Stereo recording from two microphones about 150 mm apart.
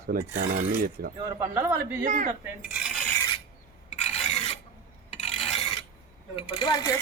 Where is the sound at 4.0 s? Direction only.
45° left (ahead or behind).